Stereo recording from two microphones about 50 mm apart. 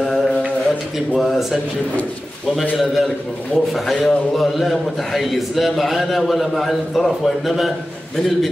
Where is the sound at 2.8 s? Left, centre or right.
Centre.